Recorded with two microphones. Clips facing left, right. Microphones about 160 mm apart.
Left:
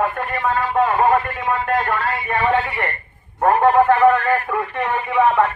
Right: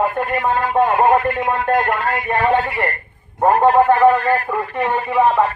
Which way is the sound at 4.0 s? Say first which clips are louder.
Right 1 dB; 35° right (ahead or behind).